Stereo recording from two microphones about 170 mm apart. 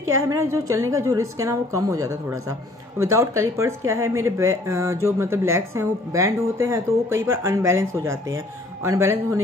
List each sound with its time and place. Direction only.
0.3 s a woman's voice: 20° right (ahead or behind)